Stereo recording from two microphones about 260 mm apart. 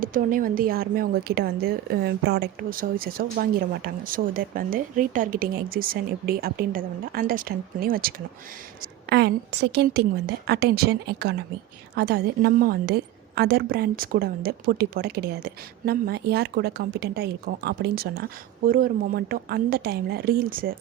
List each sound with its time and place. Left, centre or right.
0.0 s a woman's voice: right